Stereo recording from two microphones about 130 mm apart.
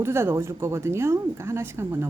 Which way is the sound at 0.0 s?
20° right (ahead or behind).